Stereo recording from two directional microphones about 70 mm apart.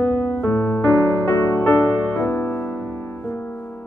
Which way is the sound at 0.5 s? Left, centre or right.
Left.